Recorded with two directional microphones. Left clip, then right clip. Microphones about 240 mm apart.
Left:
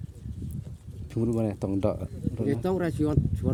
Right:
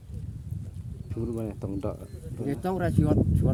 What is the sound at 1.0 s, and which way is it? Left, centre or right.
Speech, left.